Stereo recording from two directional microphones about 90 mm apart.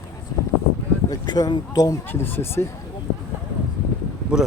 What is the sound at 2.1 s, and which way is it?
Speech, 20° left (ahead or behind).